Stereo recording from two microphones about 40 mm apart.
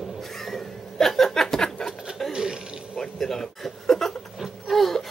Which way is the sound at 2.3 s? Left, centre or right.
Centre.